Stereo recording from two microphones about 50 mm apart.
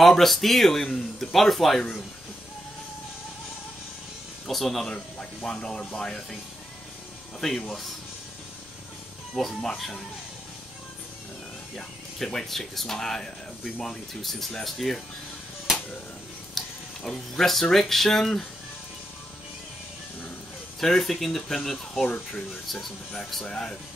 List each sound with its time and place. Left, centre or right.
0.0 s speech: centre
4.5 s speech: centre
4.8 s speech: centre
7.3 s speech: centre
9.3 s speech: centre
11.7 s speech: centre
16.6 s a sound: centre
17.0 s speech: centre
17.5 s speech: centre
20.8 s speech: centre
23.4 s speech: centre